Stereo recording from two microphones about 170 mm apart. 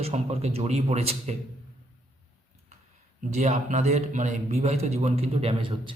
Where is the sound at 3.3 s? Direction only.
40° right (ahead or behind).